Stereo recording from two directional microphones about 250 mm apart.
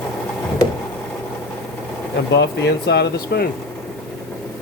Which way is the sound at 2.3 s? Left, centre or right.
Left.